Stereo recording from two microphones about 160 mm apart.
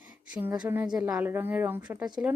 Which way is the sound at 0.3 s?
10° right (ahead or behind).